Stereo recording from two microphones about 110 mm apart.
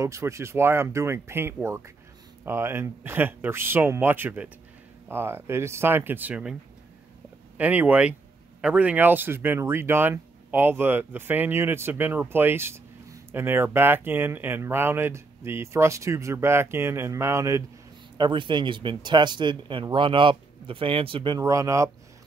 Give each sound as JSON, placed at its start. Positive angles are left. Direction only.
{"t": 0.0, "sound": "speech", "side_deg": -25}
{"t": 7.5, "sound": "speech", "side_deg": -15}
{"t": 18.1, "sound": "speech", "side_deg": -45}
{"t": 21.4, "sound": "speech", "side_deg": -30}